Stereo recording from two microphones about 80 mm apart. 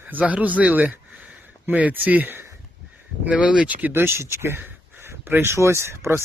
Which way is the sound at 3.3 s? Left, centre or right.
Centre.